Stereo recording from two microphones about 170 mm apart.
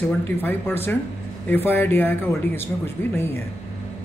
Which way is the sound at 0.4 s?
10° left (ahead or behind).